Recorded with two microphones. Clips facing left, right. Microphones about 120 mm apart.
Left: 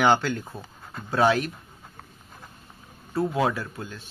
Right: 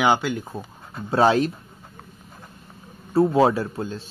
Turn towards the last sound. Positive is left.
turn(degrees=-30)  # may be behind; listen again after turning